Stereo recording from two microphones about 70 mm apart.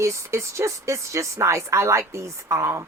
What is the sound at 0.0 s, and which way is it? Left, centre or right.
A woman's voice, right.